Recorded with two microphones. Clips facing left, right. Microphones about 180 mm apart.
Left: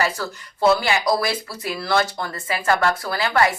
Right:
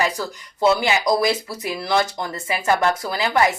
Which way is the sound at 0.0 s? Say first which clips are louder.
Right 1 dB; 15° right (ahead or behind).